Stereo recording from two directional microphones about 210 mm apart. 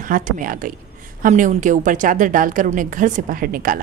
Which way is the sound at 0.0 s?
40° right (ahead or behind).